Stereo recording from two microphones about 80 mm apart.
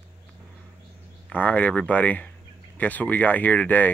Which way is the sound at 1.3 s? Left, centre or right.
Centre.